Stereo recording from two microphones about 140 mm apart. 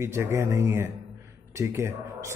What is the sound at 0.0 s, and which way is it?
Speech, 20° right (ahead or behind).